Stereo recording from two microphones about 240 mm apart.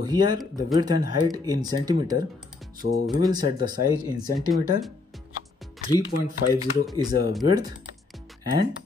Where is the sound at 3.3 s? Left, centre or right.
Centre.